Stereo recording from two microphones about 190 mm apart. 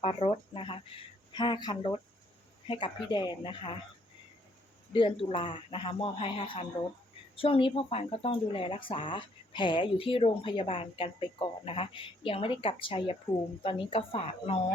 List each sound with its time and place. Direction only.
0.0 s speech: 30° left (ahead or behind)
4.9 s speech: 25° left (ahead or behind)